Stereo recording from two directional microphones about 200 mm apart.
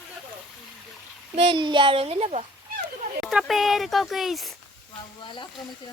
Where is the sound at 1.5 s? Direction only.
25° right (ahead or behind).